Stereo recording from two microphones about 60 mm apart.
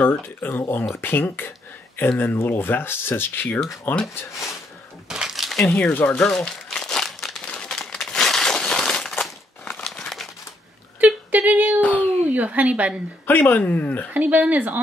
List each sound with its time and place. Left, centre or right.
0.0 s speech: left
5.0 s a sound: centre
5.7 s speech: left
6.1 s crumpling: centre
7.4 s a sound: centre
9.9 s crumpling: centre
11.3 s female singing: right
11.8 s a sound: left
12.3 s speech: right
13.3 s speech: left
14.1 s speech: right